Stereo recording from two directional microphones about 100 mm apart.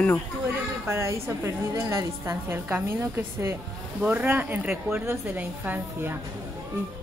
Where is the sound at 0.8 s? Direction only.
25° right (ahead or behind).